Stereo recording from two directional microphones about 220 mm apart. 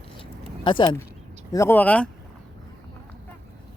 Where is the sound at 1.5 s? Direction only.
10° left (ahead or behind).